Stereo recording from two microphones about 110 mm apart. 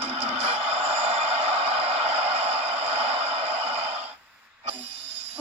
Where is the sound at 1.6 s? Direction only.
65° right (ahead or behind).